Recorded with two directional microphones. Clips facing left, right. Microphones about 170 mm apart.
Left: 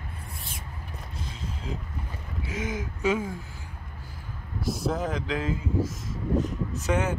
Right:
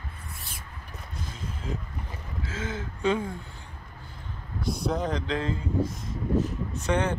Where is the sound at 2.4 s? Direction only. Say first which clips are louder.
Left 2 dB; 10° left (ahead or behind).